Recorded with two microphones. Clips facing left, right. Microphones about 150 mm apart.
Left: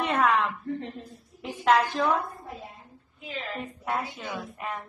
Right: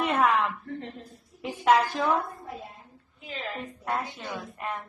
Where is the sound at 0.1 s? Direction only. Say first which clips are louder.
Left 1 dB; centre (ahead or behind).